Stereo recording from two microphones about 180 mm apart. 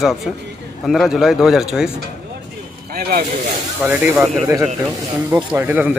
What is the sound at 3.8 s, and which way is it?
Speech, 5° right (ahead or behind).